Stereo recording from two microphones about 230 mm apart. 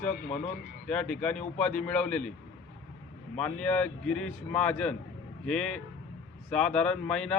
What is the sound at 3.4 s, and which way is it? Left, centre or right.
A man's voice, centre.